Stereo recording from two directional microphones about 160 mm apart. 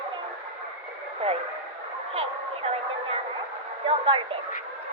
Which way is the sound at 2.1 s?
35° right (ahead or behind).